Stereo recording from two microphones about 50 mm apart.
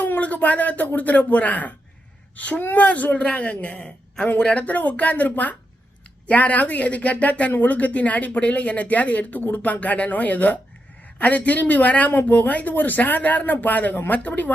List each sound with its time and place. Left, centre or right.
0.0 s speech: left; by 4.6 s centre
4.6 s speech: left